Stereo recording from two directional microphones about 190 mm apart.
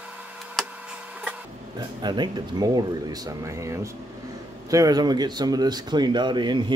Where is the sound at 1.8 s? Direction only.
20° right (ahead or behind).